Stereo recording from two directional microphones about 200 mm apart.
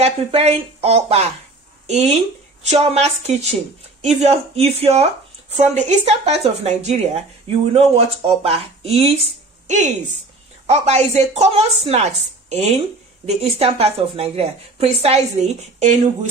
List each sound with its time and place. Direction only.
0.0 s speech: 30° right (ahead or behind)
10.7 s speech: 35° right (ahead or behind)